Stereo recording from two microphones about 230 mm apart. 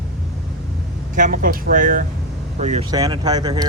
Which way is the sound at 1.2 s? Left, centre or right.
Right.